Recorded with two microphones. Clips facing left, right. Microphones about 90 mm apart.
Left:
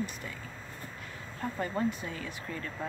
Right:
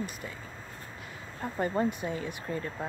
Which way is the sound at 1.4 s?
20° right (ahead or behind).